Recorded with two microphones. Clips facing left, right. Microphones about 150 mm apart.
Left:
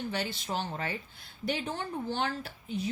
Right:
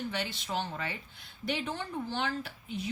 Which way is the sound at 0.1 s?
40° left (ahead or behind).